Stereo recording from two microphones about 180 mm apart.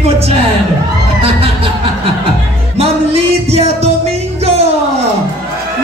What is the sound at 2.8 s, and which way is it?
Music, 35° right (ahead or behind).